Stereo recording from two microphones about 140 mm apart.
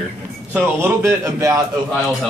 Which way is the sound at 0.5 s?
15° right (ahead or behind).